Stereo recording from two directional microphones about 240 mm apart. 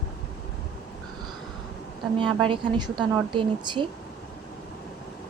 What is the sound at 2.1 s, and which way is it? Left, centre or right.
A woman's voice, right.